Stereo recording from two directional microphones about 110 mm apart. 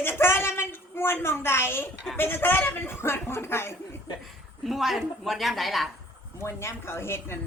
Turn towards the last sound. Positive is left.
turn(degrees=20)  # may be behind; listen again after turning